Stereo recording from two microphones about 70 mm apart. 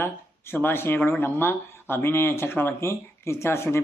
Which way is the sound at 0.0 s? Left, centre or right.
Left.